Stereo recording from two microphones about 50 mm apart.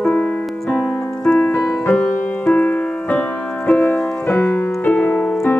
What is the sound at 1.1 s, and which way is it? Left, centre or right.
Music, centre.